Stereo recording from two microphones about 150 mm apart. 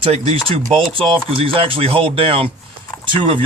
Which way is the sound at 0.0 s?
40° right (ahead or behind).